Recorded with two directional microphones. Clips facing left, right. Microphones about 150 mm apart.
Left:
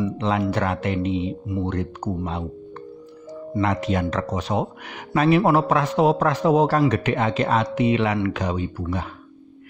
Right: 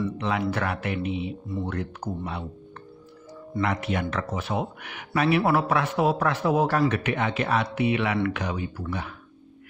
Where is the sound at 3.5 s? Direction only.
35° left (ahead or behind).